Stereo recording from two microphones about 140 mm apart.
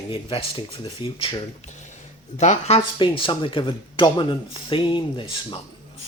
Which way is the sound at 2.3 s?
55° left (ahead or behind).